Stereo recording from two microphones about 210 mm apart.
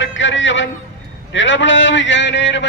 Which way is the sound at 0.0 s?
60° left (ahead or behind).